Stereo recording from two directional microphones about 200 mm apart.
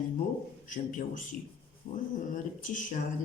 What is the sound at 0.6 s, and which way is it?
A man's voice, 40° left (ahead or behind).